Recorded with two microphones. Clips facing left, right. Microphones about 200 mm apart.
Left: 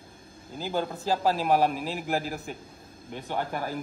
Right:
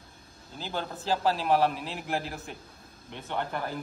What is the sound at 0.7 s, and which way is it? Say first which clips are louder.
Speech: left 3 dB; 10° left (ahead or behind).